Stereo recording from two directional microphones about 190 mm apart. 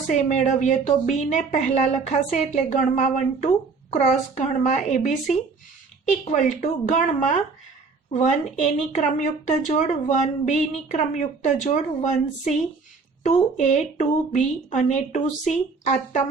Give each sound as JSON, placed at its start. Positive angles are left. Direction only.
{"t": 0.1, "sound": "speech", "side_deg": 40}